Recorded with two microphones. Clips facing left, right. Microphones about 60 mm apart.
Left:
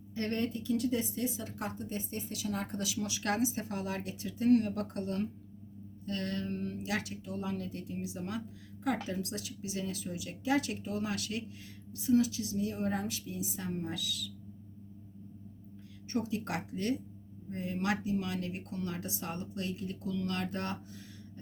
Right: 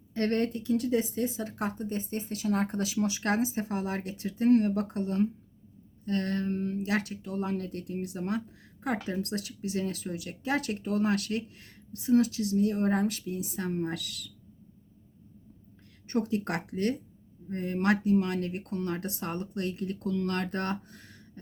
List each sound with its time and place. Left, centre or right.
0.1 s speech: right
16.1 s speech: right